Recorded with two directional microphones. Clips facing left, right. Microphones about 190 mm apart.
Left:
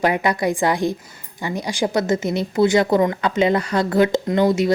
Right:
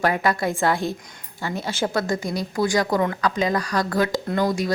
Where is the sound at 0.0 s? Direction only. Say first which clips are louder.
Left 3 dB; 20° left (ahead or behind).